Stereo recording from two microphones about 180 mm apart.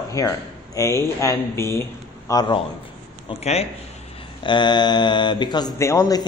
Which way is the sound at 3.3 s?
35° left (ahead or behind).